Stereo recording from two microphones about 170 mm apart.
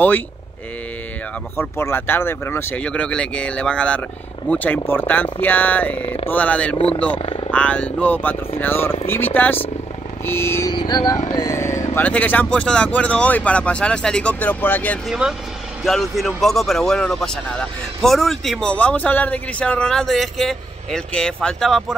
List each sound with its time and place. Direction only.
1.6 s speech: 15° left (ahead or behind)
6.0 s speech: 35° left (ahead or behind)
6.3 s speech: 10° left (ahead or behind)
7.2 s speech: 35° left (ahead or behind)
7.5 s speech: 10° left (ahead or behind)
10.7 s speech: 25° left (ahead or behind); by 15.0 s 10° left (ahead or behind)
15.0 s speech: 5° right (ahead or behind)